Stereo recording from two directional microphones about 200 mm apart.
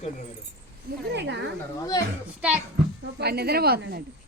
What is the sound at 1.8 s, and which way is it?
Speech, 15° left (ahead or behind).